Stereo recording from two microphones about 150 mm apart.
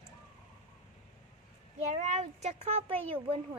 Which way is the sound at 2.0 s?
50° right (ahead or behind).